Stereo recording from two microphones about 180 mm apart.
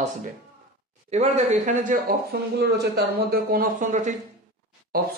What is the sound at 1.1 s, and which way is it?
Speech, 40° right (ahead or behind).